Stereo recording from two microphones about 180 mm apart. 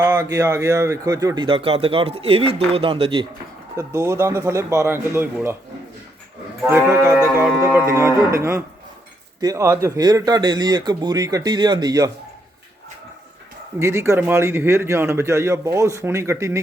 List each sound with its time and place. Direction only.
0.0 s speech: 15° right (ahead or behind)
3.8 s a man's voice: 15° right (ahead or behind)
6.7 s a man's voice: 15° right (ahead or behind)
13.7 s a man's voice: 15° right (ahead or behind)